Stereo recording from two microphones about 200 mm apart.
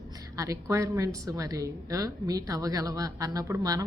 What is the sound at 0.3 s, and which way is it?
A woman's voice, 15° right (ahead or behind).